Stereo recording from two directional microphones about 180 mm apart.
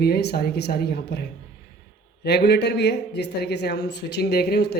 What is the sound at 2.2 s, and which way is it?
Speech, 65° left (ahead or behind).